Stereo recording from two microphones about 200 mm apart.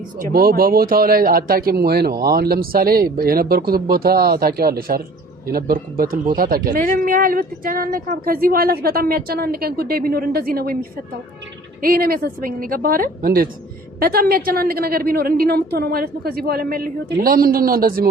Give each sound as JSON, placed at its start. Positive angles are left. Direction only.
{"t": 0.2, "sound": "speech", "side_deg": -45}